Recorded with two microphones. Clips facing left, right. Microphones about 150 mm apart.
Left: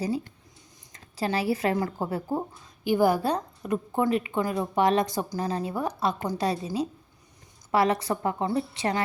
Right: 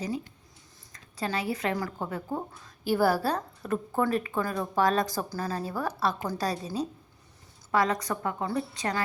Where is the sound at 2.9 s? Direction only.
15° left (ahead or behind).